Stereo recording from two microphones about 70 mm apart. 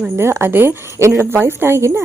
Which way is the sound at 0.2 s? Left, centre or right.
Right.